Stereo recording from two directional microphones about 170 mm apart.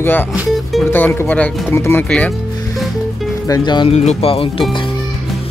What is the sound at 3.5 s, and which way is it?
Speech, 25° left (ahead or behind).